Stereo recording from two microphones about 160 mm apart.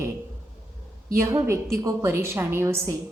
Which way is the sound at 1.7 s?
20° right (ahead or behind).